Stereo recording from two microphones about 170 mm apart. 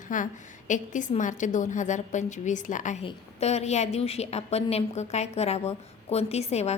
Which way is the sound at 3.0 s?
35° left (ahead or behind).